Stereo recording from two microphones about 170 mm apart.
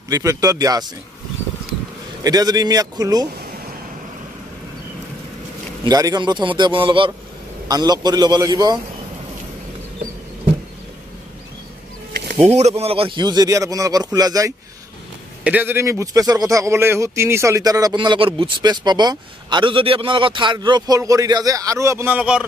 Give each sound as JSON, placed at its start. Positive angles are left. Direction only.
{"t": 0.1, "sound": "a man's voice", "side_deg": -20}
{"t": 2.2, "sound": "a man's voice", "side_deg": -20}
{"t": 5.9, "sound": "a man's voice", "side_deg": -20}
{"t": 12.5, "sound": "a man's voice", "side_deg": -40}
{"t": 15.4, "sound": "a man's voice", "side_deg": -10}